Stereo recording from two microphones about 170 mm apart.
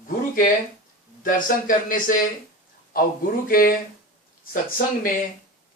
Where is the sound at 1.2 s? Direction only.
55° left (ahead or behind).